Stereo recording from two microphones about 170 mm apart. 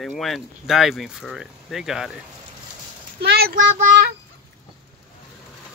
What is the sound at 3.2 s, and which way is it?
Speech, 65° right (ahead or behind).